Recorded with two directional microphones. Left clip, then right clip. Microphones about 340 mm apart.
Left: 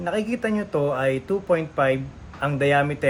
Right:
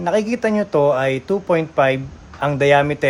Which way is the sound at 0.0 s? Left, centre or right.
Right.